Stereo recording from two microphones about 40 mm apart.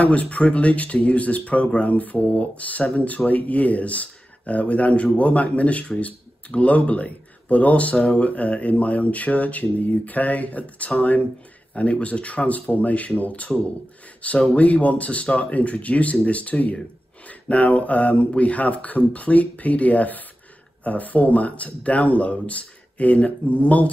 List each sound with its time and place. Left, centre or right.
0.0 s speech: left